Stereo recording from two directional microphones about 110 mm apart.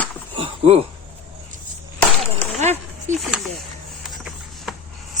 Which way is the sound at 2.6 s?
90° right.